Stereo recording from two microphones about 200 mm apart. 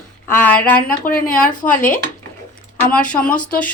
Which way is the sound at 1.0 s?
45° left (ahead or behind).